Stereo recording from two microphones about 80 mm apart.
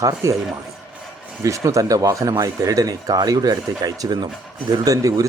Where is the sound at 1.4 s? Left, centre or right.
Right.